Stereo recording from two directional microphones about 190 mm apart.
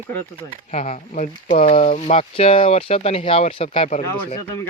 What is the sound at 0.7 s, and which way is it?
Speech, 35° left (ahead or behind).